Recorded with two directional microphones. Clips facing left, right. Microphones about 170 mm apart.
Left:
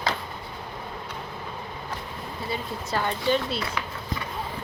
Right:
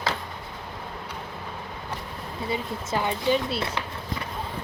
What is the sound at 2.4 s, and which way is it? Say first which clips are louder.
Speech: right 2 dB; 20° right (ahead or behind).